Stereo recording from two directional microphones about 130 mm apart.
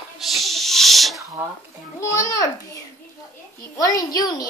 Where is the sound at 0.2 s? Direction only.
Centre (ahead or behind).